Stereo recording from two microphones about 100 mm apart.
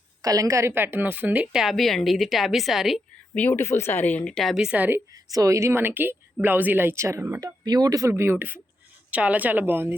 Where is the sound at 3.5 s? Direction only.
25° left (ahead or behind).